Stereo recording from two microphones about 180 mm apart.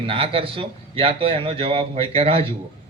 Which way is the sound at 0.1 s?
30° right (ahead or behind).